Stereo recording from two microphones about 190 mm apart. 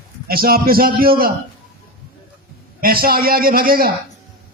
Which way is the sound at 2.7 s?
50° right (ahead or behind).